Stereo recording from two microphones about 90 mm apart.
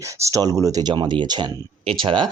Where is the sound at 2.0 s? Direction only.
70° right (ahead or behind).